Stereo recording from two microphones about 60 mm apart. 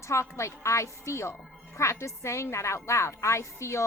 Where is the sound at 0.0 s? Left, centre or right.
Left.